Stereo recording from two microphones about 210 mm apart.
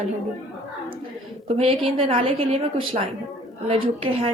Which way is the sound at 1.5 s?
25° right (ahead or behind).